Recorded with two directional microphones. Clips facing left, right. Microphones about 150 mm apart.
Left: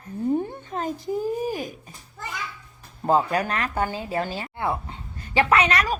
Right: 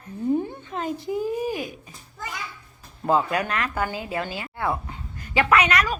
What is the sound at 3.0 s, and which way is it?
A woman's voice, 35° left (ahead or behind).